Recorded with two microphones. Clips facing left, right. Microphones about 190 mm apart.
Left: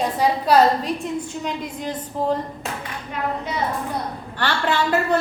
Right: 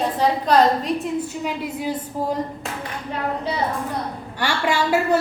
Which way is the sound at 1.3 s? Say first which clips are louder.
Right 1 dB; 5° right (ahead or behind).